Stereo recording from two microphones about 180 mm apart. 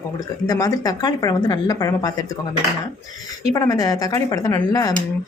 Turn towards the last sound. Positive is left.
turn(degrees=20)  # may be behind; listen again after turning